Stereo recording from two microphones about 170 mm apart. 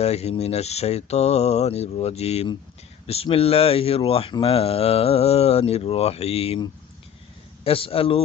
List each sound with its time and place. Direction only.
0.0 s speech: 40° left (ahead or behind)
7.6 s speech: 35° left (ahead or behind)